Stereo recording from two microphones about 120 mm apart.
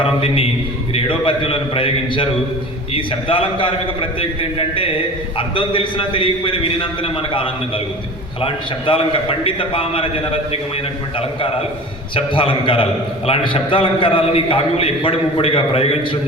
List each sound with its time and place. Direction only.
0.0 s a man's voice: 50° left (ahead or behind)
12.1 s a man's voice: 45° left (ahead or behind)